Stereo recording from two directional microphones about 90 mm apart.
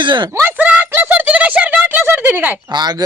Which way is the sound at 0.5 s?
15° right (ahead or behind).